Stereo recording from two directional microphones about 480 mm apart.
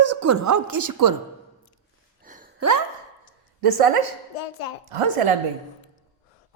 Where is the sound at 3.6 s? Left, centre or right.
Right.